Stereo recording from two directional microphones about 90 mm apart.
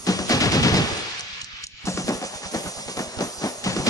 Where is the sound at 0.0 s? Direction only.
45° left (ahead or behind).